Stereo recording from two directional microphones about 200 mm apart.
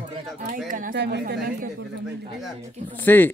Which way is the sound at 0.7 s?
45° right (ahead or behind).